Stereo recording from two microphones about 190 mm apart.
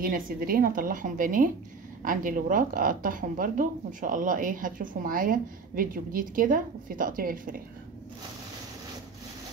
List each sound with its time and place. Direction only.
0.0 s a woman's voice: 50° right (ahead or behind)